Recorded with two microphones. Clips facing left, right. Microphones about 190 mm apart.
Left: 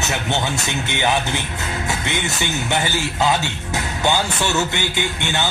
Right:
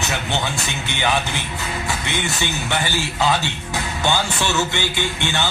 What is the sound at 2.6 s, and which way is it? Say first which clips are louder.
Speech: left 2 dB; 20° left (ahead or behind).